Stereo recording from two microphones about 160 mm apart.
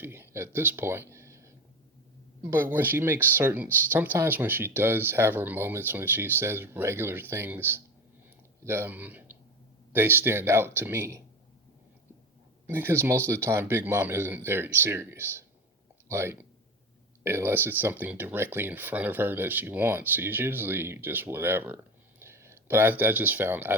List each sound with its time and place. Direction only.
0.0 s a sound: 15° right (ahead or behind)
2.5 s speech: 15° right (ahead or behind)
12.6 s speech: 15° right (ahead or behind)